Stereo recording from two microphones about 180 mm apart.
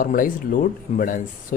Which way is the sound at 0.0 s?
50° left (ahead or behind).